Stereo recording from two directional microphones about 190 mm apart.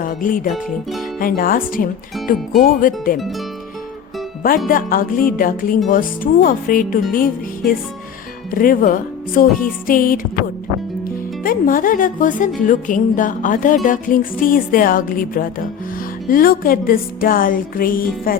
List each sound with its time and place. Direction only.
0.0 s music: 45° left (ahead or behind)
0.5 s speech: centre (ahead or behind)
1.2 s a woman's voice: 50° left (ahead or behind)
4.7 s a woman's voice: 50° left (ahead or behind)
11.4 s a woman's voice: 45° left (ahead or behind)